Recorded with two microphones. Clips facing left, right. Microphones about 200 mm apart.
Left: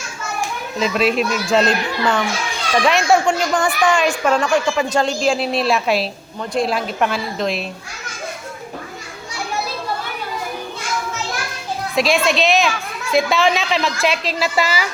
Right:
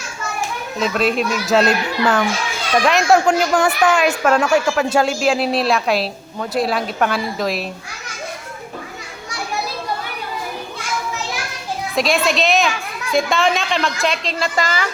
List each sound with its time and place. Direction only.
0.8 s speech: centre (ahead or behind)
11.9 s speech: centre (ahead or behind)